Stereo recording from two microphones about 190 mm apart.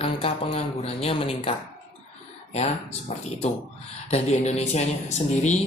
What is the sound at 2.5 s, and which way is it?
Speech, 35° left (ahead or behind).